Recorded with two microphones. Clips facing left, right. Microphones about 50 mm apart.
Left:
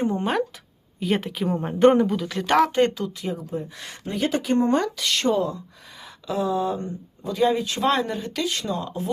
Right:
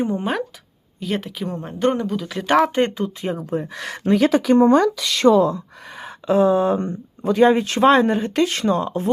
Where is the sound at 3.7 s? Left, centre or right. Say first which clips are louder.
Right 12 dB; right.